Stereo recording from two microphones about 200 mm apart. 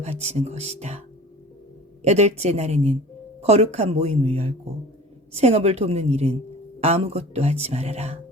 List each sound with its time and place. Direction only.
0.0 s speech: 35° right (ahead or behind)